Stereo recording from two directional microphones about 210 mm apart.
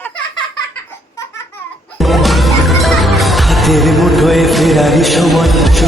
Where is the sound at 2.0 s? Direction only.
Centre (ahead or behind).